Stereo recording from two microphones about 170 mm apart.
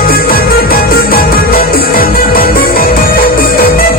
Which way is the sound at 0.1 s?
60° left (ahead or behind).